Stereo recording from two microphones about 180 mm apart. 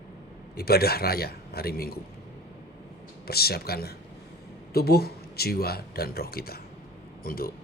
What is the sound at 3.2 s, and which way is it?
A man's voice, 60° left (ahead or behind).